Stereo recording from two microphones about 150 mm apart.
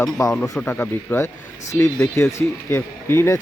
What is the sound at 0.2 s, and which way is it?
Speech, 20° left (ahead or behind).